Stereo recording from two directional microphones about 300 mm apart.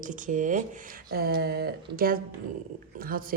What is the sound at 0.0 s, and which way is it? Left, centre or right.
Speech, right.